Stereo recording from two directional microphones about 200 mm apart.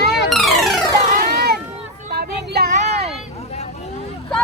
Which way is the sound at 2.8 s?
30° right (ahead or behind).